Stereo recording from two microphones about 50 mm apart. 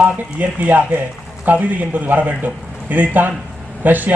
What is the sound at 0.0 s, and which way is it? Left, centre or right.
A man's voice, right.